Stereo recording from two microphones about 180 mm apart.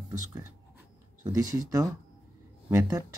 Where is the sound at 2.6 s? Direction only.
15° right (ahead or behind).